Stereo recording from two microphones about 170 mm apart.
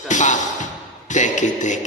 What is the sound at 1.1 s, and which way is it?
Speech, 45° left (ahead or behind).